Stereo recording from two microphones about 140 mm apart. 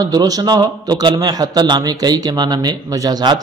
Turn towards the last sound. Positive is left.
turn(degrees=-30)  # may be behind; listen again after turning